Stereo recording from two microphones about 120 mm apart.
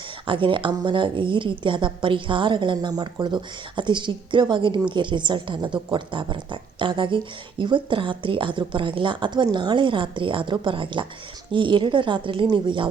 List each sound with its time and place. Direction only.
0.3 s a woman's voice: 45° right (ahead or behind)